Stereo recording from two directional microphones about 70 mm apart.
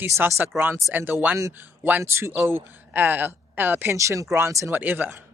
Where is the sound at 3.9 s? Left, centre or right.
Right.